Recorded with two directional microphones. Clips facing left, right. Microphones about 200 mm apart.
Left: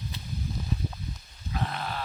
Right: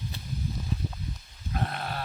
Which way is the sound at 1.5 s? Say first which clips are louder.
Even; 50° right (ahead or behind).